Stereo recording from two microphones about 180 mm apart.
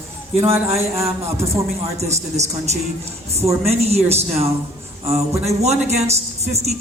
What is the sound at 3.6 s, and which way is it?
Speech, 35° right (ahead or behind).